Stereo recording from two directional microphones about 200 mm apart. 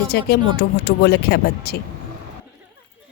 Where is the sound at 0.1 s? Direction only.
55° left (ahead or behind).